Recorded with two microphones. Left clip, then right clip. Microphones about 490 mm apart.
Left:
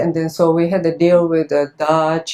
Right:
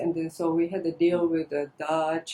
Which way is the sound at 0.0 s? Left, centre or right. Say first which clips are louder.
Left 12 dB; left.